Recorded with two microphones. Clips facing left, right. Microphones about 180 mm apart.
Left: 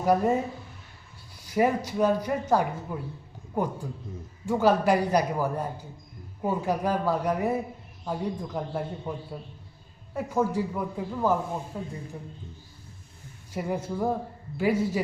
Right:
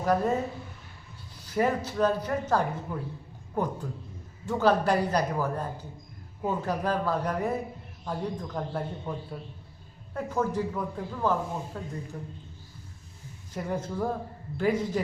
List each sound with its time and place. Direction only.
0.0 s speech: 10° left (ahead or behind)
1.4 s speech: 10° left (ahead or behind)
10.2 s speech: 10° left (ahead or behind)
13.5 s speech: 10° left (ahead or behind)